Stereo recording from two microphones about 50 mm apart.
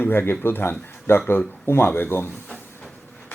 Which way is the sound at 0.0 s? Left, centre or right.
Left.